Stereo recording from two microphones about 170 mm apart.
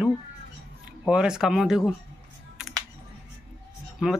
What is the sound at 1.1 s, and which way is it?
Speech, 5° right (ahead or behind).